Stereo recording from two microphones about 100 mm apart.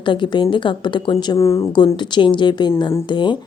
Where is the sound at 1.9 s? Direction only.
50° left (ahead or behind).